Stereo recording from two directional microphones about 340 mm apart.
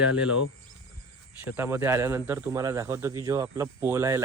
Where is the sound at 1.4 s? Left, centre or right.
Centre.